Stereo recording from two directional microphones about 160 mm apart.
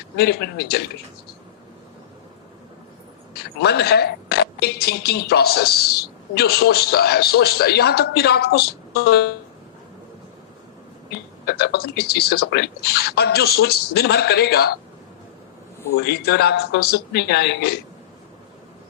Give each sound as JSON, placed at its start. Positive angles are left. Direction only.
{"t": 0.2, "sound": "speech", "side_deg": 90}
{"t": 3.6, "sound": "speech", "side_deg": 90}
{"t": 11.1, "sound": "speech", "side_deg": 90}
{"t": 16.0, "sound": "speech", "side_deg": 85}